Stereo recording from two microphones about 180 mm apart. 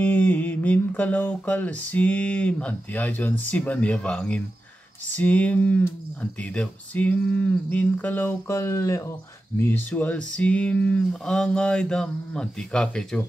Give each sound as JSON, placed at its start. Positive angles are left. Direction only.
{"t": 0.0, "sound": "music", "side_deg": 10}
{"t": 9.6, "sound": "speech", "side_deg": 10}